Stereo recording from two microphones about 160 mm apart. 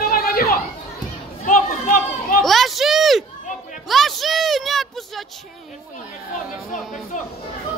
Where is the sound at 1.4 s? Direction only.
55° left (ahead or behind).